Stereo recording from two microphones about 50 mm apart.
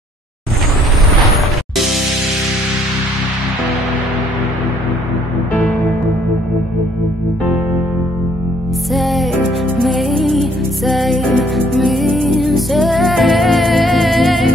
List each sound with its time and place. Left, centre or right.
8.9 s music: centre